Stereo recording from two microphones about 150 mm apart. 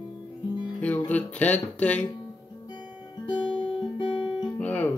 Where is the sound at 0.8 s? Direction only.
10° left (ahead or behind).